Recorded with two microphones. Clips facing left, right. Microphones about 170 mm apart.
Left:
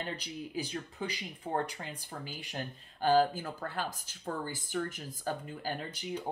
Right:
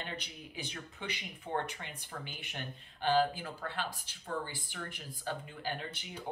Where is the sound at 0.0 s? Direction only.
35° left (ahead or behind).